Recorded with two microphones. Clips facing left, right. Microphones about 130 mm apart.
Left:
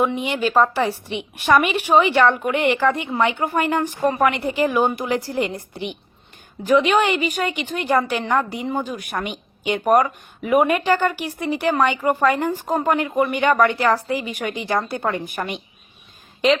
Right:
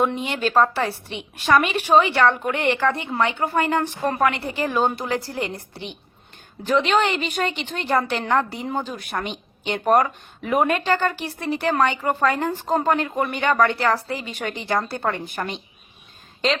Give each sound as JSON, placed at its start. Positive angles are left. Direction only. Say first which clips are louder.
{"t": 0.2, "sound": "a woman's voice", "louder": "left 1 dB", "side_deg": 15}